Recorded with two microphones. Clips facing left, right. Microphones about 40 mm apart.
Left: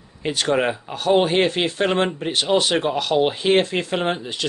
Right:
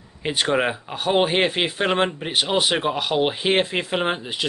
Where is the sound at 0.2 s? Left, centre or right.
Centre.